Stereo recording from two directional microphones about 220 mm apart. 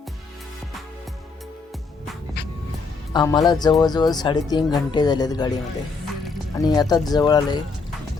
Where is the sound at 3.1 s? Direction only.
20° left (ahead or behind).